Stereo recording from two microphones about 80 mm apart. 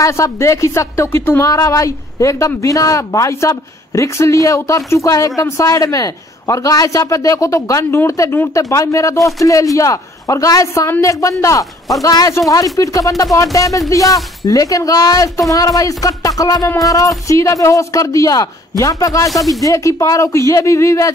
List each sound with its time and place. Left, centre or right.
0.0 s speech: left
19.3 s speech: centre
19.6 s speech: left